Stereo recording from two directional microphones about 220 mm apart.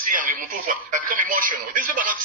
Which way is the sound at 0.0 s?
40° right (ahead or behind).